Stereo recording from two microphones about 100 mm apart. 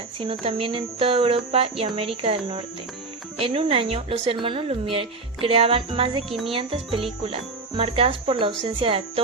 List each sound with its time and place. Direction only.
0.2 s a woman's voice: 65° right (ahead or behind)
7.8 s speech: 80° right